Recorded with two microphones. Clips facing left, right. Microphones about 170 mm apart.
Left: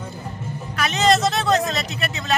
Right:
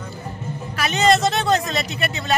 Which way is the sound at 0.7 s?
Centre (ahead or behind).